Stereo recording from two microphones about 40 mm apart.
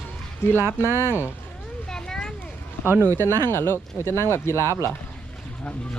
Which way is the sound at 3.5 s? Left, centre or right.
Left.